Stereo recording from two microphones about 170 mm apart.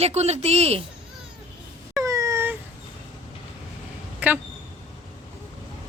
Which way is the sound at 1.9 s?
20° right (ahead or behind).